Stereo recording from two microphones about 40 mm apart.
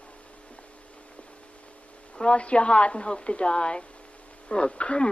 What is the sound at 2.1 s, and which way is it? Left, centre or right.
A woman's voice, left.